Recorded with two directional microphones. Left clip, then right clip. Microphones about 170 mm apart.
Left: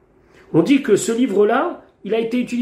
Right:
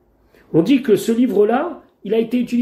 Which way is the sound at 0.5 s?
30° right (ahead or behind).